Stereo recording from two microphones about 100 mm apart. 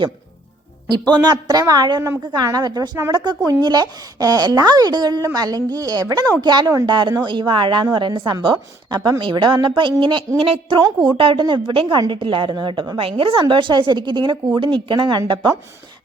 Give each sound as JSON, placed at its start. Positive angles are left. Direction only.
{"t": 0.9, "sound": "a woman's voice", "side_deg": -45}
{"t": 6.4, "sound": "a woman's voice", "side_deg": -45}
{"t": 10.4, "sound": "a woman's voice", "side_deg": -75}
{"t": 11.2, "sound": "a woman's voice", "side_deg": -60}
{"t": 13.0, "sound": "a woman's voice", "side_deg": -65}